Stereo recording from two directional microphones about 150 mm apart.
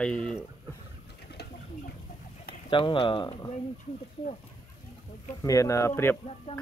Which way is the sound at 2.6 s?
35° left (ahead or behind).